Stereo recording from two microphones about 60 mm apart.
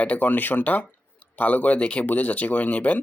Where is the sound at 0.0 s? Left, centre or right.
Left.